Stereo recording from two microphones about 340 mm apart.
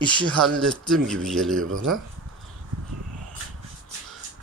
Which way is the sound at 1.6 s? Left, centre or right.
Right.